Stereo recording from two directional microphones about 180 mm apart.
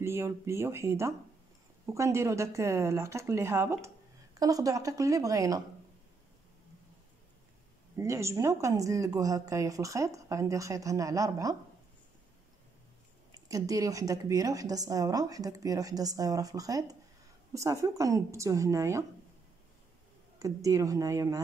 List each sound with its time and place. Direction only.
0.0 s a woman's voice: 15° right (ahead or behind)
7.9 s speech: 15° right (ahead or behind)
13.3 s a woman's voice: 20° right (ahead or behind)
20.3 s a woman's voice: 20° right (ahead or behind)